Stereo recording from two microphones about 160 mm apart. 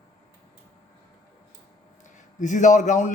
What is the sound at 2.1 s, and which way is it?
Speech, 50° left (ahead or behind).